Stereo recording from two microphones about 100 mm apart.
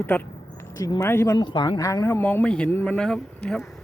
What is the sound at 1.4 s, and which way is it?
Speech, 45° left (ahead or behind).